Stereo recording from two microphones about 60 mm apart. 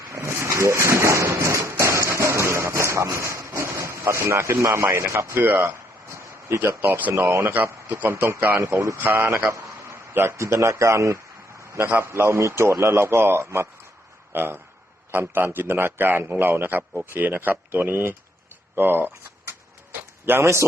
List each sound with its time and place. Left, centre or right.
0.1 s a sound: right
4.6 s speech: right
5.3 s a man's voice: right
8.1 s speech: right
8.4 s a man's voice: right
9.0 s speech: right
9.5 s a sound: right
10.2 s speech: right
11.7 s a man's voice: right
18.8 s a sound: right
20.4 s speech: right